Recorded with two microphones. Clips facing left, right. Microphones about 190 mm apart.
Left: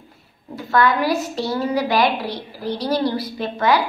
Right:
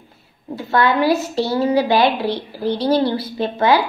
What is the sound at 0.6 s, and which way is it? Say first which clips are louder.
A woman's voice: right 1 dB; 25° right (ahead or behind).